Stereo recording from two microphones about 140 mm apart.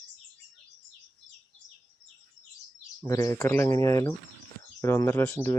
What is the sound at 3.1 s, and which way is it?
Speech, 25° left (ahead or behind).